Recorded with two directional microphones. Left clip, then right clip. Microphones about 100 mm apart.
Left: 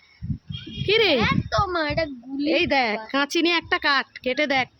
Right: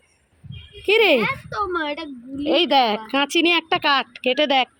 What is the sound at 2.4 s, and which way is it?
A woman's voice, 20° right (ahead or behind).